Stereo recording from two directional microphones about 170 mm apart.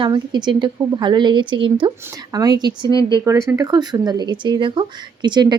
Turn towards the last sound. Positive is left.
turn(degrees=-25)  # may be behind; listen again after turning